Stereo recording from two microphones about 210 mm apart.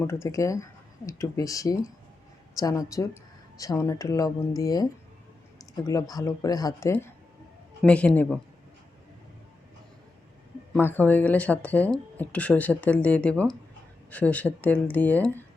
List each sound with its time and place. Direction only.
0.0 s speech: 10° left (ahead or behind)
10.8 s speech: 10° left (ahead or behind)